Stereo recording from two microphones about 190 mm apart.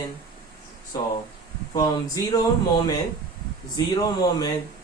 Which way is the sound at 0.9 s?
20° left (ahead or behind).